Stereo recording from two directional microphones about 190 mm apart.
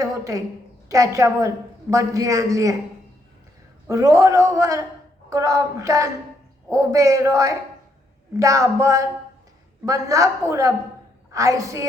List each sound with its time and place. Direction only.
0.0 s a woman's voice: 15° right (ahead or behind)
3.8 s a woman's voice: 15° right (ahead or behind)